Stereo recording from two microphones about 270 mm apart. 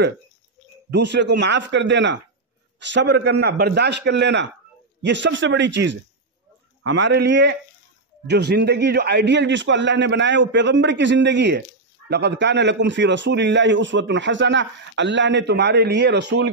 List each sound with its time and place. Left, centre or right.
0.8 s a man's voice: right